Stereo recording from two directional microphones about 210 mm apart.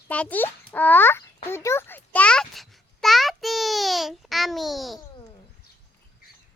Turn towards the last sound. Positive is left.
turn(degrees=0)  # may be behind; listen again after turning